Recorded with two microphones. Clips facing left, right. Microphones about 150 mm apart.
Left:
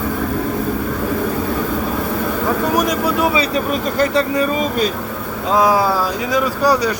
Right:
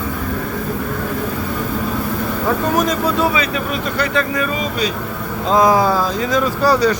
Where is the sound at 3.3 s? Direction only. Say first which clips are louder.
Left 2 dB; 35° left (ahead or behind).